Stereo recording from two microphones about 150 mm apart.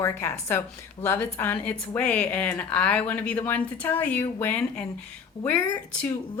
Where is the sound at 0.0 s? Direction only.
20° left (ahead or behind).